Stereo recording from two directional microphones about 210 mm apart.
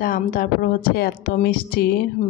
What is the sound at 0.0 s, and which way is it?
Speech, 40° left (ahead or behind).